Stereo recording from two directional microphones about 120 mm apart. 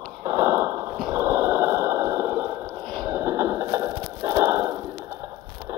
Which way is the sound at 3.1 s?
20° right (ahead or behind).